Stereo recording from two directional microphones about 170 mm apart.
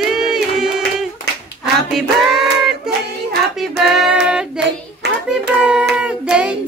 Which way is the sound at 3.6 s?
Centre (ahead or behind).